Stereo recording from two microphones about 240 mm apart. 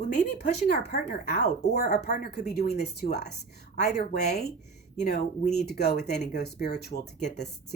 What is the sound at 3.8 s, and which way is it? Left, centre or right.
Speech, left.